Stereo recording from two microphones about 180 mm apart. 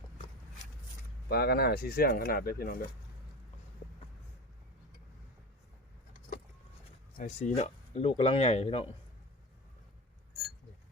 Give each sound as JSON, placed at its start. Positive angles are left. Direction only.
{"t": 1.3, "sound": "speech", "side_deg": 60}
{"t": 7.2, "sound": "speech", "side_deg": 40}